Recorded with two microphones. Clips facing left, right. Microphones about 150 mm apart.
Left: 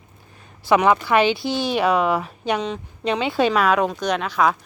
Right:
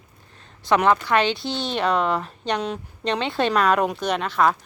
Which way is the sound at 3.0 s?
5° left (ahead or behind).